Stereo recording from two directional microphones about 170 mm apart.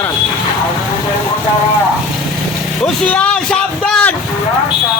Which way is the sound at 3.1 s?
5° left (ahead or behind).